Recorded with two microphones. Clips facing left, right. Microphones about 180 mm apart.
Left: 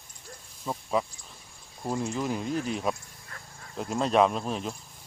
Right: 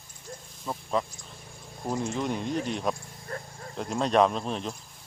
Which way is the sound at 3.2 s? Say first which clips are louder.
Right 11 dB; 35° right (ahead or behind).